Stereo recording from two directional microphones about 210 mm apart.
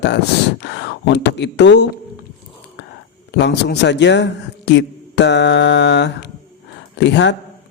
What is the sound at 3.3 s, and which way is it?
Speech, 55° left (ahead or behind).